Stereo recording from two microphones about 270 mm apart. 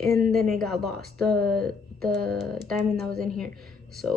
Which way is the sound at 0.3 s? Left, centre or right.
Centre.